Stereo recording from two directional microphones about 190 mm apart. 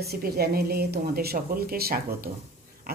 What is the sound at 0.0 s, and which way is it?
A woman's voice, 55° right (ahead or behind).